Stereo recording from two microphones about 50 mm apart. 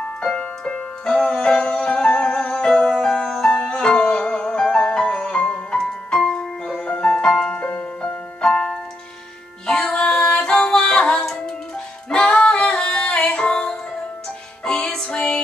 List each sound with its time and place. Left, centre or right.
0.2 s music: centre
8.4 s keyboard: centre
9.7 s music: centre
12.4 s yodeling: centre
13.5 s music: centre